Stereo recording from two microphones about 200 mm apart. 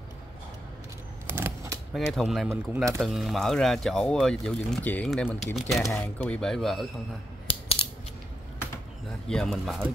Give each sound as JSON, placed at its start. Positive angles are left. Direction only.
{"t": 1.3, "sound": "a sound", "side_deg": -15}
{"t": 2.0, "sound": "speech", "side_deg": 0}
{"t": 2.5, "sound": "speech", "side_deg": -15}
{"t": 3.0, "sound": "speech", "side_deg": 0}
{"t": 7.4, "sound": "a sound", "side_deg": 30}
{"t": 9.3, "sound": "speech", "side_deg": 0}